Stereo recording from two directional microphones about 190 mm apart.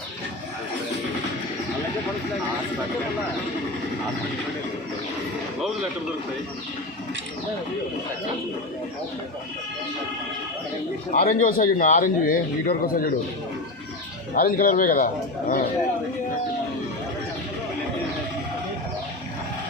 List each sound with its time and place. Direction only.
11.1 s a man's voice: 45° left (ahead or behind)
14.3 s a man's voice: 50° left (ahead or behind)